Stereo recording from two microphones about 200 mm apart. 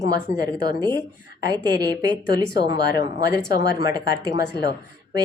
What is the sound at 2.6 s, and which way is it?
Speech, 20° right (ahead or behind).